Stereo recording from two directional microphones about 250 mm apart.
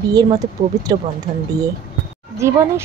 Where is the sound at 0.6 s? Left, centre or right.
Centre.